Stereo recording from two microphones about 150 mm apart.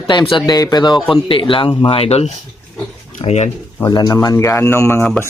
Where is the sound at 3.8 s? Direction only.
25° left (ahead or behind).